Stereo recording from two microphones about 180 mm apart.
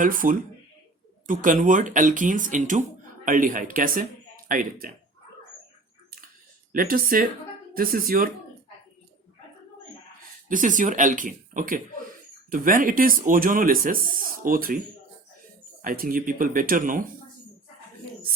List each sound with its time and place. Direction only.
0.0 s speech: 50° right (ahead or behind)
6.7 s speech: 50° right (ahead or behind)
10.5 s speech: 45° right (ahead or behind)
15.8 s speech: 50° right (ahead or behind)